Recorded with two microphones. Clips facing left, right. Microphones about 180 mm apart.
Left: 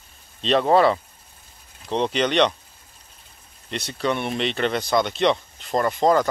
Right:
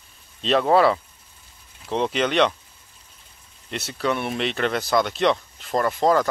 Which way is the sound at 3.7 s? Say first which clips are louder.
Even; 5° right (ahead or behind).